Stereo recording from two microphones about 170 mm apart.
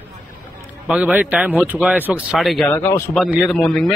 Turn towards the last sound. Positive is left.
turn(degrees=0)  # may be behind; listen again after turning